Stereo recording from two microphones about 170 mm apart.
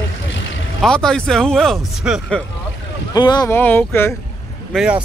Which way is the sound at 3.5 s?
10° left (ahead or behind).